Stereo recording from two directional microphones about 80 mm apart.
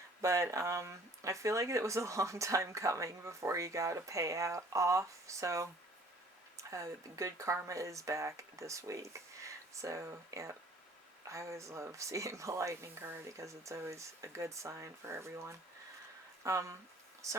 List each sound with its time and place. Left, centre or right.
0.2 s speech: right